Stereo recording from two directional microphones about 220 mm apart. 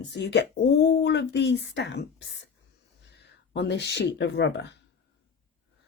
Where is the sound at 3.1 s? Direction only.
50° left (ahead or behind).